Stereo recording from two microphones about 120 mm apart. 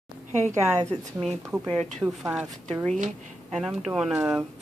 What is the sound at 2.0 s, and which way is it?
Speech, 10° right (ahead or behind).